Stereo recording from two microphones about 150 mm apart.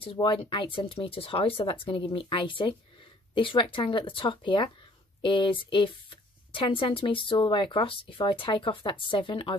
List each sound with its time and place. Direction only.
0.0 s speech: 35° left (ahead or behind)